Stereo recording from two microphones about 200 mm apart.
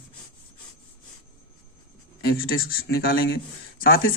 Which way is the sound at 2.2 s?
50° left (ahead or behind).